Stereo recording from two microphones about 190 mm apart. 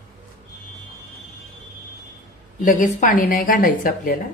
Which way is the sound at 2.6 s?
45° left (ahead or behind).